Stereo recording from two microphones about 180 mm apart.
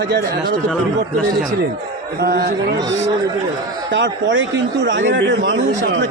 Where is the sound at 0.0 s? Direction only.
65° right (ahead or behind).